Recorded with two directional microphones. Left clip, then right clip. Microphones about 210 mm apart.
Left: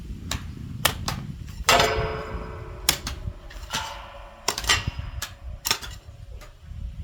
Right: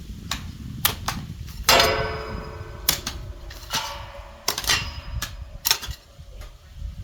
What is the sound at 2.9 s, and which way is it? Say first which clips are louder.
Typewriter: even; 15° right (ahead or behind).